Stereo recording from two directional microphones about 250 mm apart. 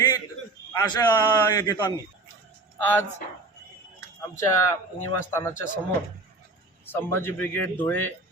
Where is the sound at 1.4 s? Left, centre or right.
Centre.